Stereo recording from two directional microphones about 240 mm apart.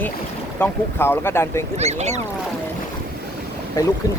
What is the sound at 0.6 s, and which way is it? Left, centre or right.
Speech, centre.